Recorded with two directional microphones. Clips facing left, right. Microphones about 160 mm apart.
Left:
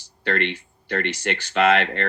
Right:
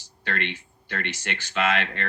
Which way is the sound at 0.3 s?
45° left (ahead or behind).